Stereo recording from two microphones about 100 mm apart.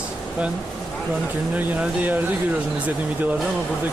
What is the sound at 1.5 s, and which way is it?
Speech, 15° right (ahead or behind).